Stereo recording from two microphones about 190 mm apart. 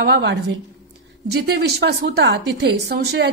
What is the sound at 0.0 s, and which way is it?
Speech, 70° right (ahead or behind).